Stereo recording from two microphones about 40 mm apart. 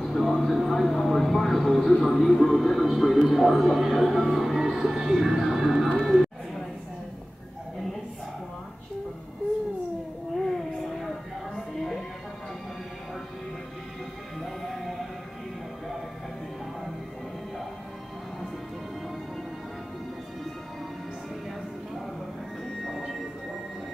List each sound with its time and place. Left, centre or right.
0.0 s vehicle: centre
3.3 s speech: centre
10.4 s a sound: centre
14.4 s music: centre
22.8 s music: centre